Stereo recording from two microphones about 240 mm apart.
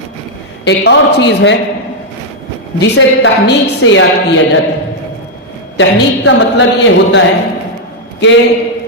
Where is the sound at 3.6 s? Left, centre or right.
Left.